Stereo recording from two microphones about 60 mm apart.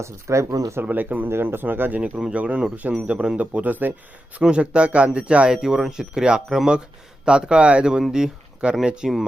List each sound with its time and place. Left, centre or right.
0.0 s speech: right
0.9 s speech: right
2.0 s speech: centre
4.4 s speech: centre